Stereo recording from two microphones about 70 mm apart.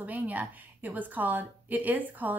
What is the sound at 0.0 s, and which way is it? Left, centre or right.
Speech, right.